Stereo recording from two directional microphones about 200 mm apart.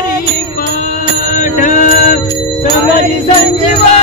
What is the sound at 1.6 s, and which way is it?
Mantra, 40° left (ahead or behind).